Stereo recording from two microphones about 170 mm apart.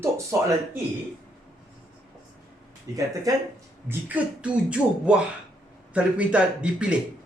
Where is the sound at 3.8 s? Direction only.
10° right (ahead or behind).